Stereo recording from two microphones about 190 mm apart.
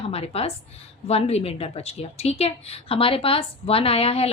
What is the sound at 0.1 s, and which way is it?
Speech, 30° left (ahead or behind).